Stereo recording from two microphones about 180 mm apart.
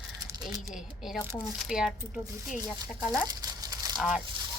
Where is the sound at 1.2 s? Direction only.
5° right (ahead or behind).